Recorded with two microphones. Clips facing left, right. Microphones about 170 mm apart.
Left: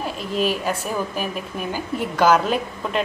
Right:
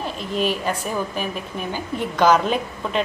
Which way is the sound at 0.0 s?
5° left (ahead or behind).